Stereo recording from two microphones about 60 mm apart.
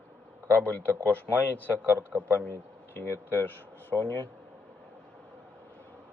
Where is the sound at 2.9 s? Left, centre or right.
Left.